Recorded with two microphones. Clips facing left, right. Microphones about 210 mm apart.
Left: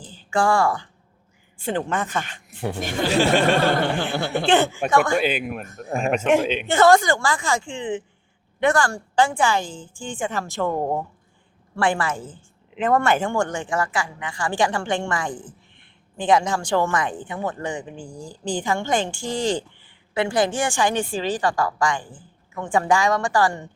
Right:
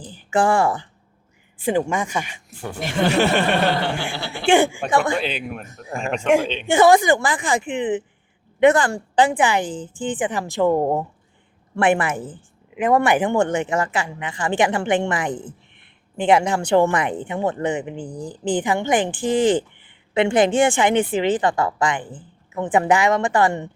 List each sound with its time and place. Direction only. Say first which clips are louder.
0.3 s a woman's voice: right 2 dB; 20° right (ahead or behind)
2.8 s chuckle: right 2 dB; 65° right (ahead or behind)
4.1 s speech: left 7 dB; 50° left (ahead or behind)
4.4 s a woman's voice: right 4 dB; 15° right (ahead or behind)
5.1 s a woman's voice: left 3 dB; 5° left (ahead or behind)
6.7 s a woman's voice: right 2 dB; 15° right (ahead or behind)